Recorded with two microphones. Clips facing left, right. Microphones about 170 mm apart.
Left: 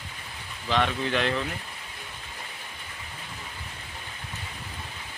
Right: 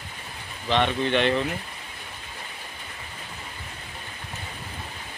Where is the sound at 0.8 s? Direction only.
Centre (ahead or behind).